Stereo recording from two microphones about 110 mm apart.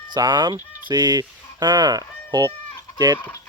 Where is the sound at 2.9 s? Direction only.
40° right (ahead or behind).